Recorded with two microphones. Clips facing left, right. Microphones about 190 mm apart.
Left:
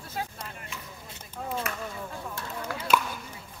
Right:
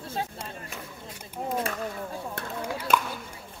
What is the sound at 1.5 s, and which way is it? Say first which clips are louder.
Chop: right 4 dB; 30° right (ahead or behind).